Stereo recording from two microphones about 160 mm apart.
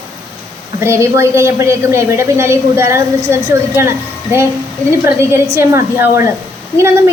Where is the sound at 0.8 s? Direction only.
15° right (ahead or behind).